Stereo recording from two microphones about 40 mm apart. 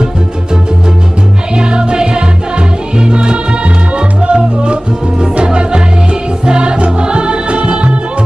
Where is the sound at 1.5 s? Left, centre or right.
Right.